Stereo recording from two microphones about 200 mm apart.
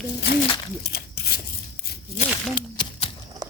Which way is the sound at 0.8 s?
55° left (ahead or behind).